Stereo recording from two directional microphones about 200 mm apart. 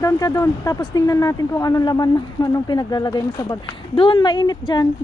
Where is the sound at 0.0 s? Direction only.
15° left (ahead or behind).